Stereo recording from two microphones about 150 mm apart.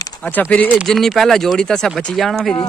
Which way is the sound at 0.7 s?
Centre (ahead or behind).